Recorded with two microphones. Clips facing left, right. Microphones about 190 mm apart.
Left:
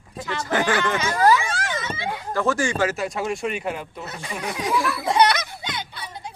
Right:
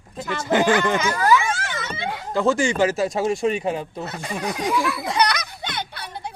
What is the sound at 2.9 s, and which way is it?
Speech, 35° right (ahead or behind).